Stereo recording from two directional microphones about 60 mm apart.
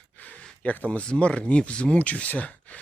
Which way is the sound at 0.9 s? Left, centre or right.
Centre.